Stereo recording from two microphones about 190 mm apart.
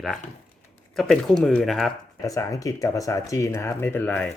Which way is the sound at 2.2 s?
15° left (ahead or behind).